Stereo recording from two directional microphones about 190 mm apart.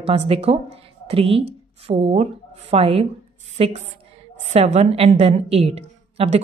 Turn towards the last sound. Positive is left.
turn(degrees=-30)  # may be behind; listen again after turning